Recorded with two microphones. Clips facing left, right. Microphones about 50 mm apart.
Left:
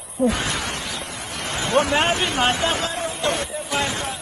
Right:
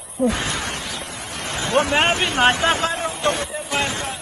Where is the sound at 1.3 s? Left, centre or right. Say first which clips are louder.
Even; left.